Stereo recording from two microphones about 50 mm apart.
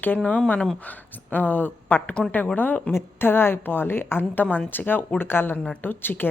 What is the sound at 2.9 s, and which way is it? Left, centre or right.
Speech, left.